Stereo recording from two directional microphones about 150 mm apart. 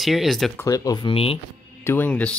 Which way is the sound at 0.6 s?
20° left (ahead or behind).